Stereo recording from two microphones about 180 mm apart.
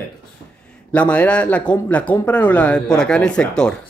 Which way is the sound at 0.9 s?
10° left (ahead or behind).